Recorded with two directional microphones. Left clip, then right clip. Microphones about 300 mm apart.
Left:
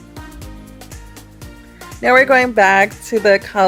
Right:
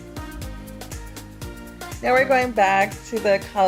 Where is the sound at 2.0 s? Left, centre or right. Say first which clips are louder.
Left 7 dB; left.